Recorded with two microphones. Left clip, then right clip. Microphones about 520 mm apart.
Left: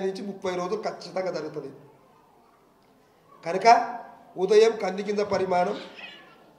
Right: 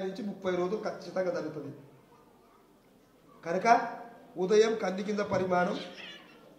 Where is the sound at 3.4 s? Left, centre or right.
Centre.